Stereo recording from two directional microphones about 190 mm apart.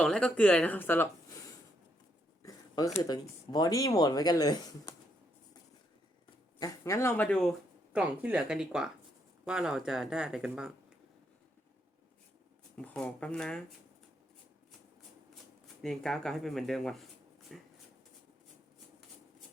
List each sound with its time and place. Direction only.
0.0 s speech: 5° left (ahead or behind); by 4.9 s 20° left (ahead or behind)
6.6 s speech: 15° left (ahead or behind)
7.9 s speech: 5° right (ahead or behind)
12.7 s speech: 5° left (ahead or behind)
15.8 s speech: centre (ahead or behind)